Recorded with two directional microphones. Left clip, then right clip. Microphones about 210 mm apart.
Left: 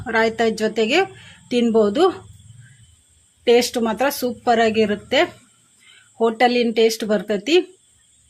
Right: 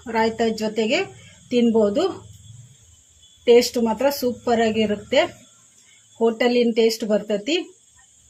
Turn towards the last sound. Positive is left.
turn(degrees=50)  # may be behind; listen again after turning